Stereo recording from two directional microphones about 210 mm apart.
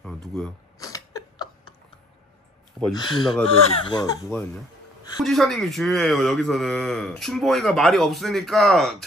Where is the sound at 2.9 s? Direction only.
20° left (ahead or behind).